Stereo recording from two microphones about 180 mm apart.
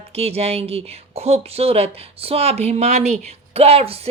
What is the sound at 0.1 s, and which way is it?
Speech, 35° right (ahead or behind).